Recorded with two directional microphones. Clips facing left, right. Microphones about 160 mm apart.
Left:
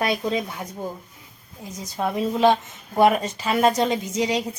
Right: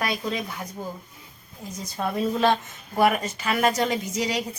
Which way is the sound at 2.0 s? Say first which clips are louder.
Left 3 dB; 15° left (ahead or behind).